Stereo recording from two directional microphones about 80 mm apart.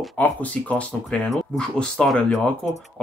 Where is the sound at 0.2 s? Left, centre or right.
Centre.